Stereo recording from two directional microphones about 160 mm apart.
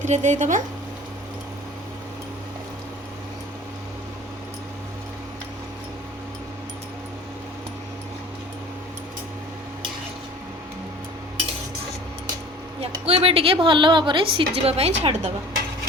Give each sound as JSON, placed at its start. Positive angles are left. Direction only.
{"t": 0.0, "sound": "speech", "side_deg": -50}
{"t": 13.1, "sound": "a woman's voice", "side_deg": -35}